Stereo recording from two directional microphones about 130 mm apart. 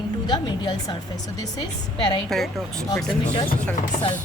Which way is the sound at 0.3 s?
35° left (ahead or behind).